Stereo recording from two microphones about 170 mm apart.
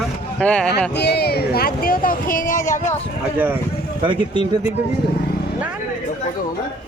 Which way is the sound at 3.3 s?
10° right (ahead or behind).